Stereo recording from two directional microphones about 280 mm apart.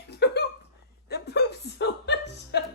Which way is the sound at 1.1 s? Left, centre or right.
Left.